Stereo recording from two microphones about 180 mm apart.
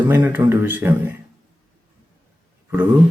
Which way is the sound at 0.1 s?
10° right (ahead or behind).